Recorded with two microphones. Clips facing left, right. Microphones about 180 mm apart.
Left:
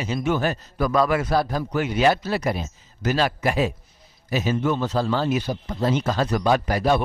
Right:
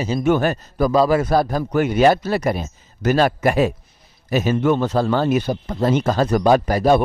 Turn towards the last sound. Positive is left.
turn(degrees=-45)  # may be behind; listen again after turning